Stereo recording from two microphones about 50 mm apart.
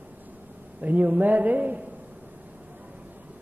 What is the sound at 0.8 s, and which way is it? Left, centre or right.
A man's voice, right.